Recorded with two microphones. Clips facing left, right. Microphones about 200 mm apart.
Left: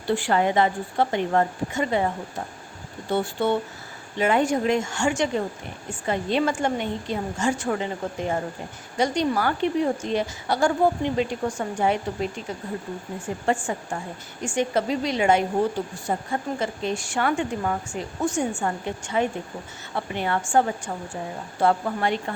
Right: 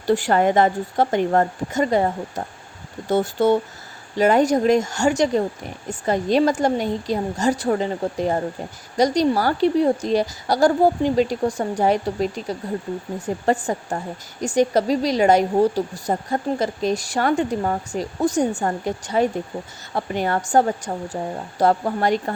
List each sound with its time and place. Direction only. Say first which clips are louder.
0.1 s a woman's voice: right 4 dB; 40° right (ahead or behind)